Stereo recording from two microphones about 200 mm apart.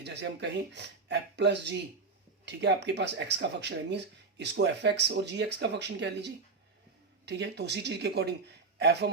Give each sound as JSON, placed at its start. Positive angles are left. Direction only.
{"t": 0.0, "sound": "speech", "side_deg": -60}